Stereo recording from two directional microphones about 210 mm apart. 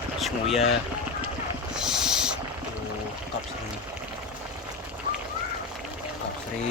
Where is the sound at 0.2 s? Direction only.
Centre (ahead or behind).